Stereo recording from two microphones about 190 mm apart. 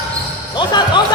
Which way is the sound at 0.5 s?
25° left (ahead or behind).